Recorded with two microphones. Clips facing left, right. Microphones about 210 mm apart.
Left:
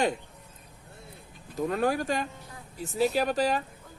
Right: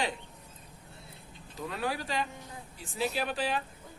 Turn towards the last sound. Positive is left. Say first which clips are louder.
# left 6 dB
turn(degrees=40)  # may be behind; listen again after turning